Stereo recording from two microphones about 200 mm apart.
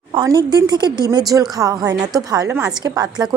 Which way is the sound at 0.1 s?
20° right (ahead or behind).